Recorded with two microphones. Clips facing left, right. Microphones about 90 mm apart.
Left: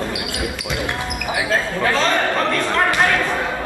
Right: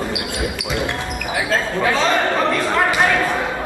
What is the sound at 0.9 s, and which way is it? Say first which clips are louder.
Basketball bounce: even; 15° left (ahead or behind).